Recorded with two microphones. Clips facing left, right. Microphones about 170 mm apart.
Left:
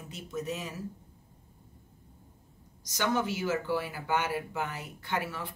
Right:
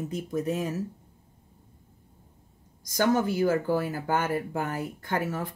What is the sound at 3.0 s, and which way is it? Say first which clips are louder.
Speech: right 6 dB; 45° right (ahead or behind).